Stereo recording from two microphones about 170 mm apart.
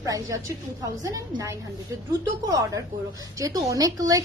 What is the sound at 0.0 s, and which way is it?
A woman's voice, 20° right (ahead or behind).